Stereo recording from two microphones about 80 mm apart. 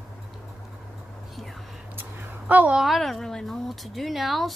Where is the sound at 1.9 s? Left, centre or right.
Right.